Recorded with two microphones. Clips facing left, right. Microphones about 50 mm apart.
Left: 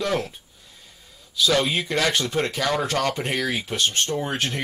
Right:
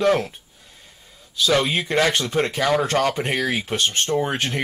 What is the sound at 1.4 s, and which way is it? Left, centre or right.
Speech, centre.